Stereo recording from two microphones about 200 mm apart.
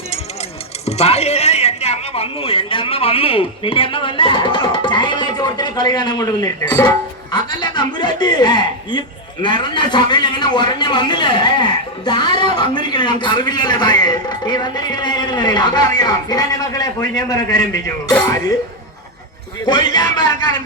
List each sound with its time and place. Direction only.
0.9 s a man's voice: 30° left (ahead or behind); by 17.9 s 15° left (ahead or behind)
19.6 s a man's voice: 20° left (ahead or behind)